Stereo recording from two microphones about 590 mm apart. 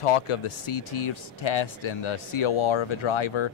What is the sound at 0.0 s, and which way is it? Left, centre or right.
Speech, left.